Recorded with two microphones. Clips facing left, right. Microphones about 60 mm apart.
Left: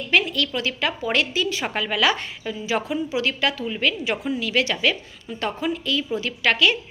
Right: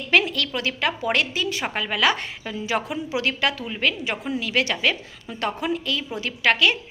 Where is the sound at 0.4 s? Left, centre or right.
Right.